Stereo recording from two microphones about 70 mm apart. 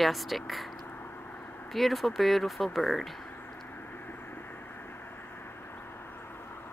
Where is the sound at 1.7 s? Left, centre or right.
Centre.